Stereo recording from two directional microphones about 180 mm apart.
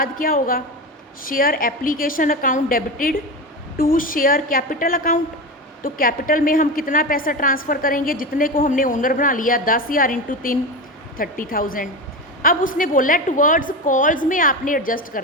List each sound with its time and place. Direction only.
0.0 s a woman's voice: 50° left (ahead or behind)